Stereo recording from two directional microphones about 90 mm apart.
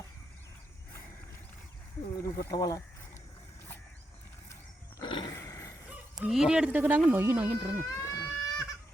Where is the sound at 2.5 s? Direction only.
45° left (ahead or behind).